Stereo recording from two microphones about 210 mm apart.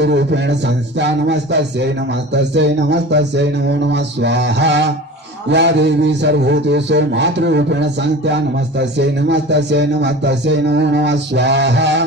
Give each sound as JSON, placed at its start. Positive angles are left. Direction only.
{"t": 0.0, "sound": "a man's voice", "side_deg": -55}